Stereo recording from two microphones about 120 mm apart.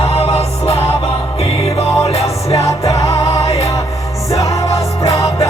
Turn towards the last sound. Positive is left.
turn(degrees=25)  # may be behind; listen again after turning